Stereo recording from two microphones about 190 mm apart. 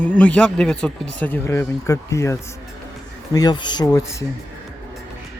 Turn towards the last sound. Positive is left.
turn(degrees=15)  # may be behind; listen again after turning